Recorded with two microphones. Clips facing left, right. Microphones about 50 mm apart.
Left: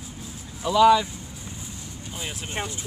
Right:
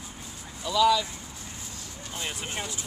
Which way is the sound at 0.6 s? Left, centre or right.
Left.